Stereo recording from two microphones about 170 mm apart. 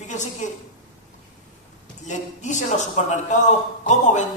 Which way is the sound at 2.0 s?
45° left (ahead or behind).